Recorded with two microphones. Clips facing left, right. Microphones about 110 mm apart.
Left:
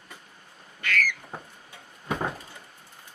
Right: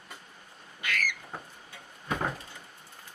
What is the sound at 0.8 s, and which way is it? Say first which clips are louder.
Squawk: left 5 dB; 15° right (ahead or behind).